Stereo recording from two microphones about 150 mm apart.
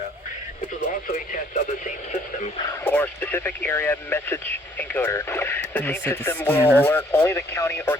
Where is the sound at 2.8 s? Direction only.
10° left (ahead or behind).